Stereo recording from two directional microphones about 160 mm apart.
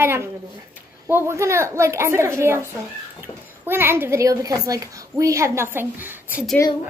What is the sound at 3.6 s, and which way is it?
A woman's voice, 15° right (ahead or behind).